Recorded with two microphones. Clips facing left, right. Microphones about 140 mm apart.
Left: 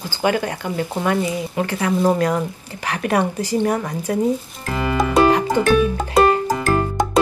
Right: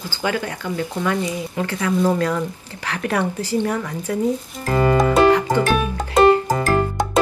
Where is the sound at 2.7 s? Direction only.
15° left (ahead or behind).